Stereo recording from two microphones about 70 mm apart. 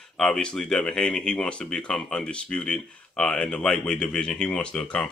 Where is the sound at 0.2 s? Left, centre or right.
Centre.